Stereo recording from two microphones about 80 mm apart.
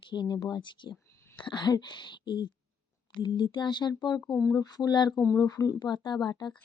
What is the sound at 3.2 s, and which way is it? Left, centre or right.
Speech, left.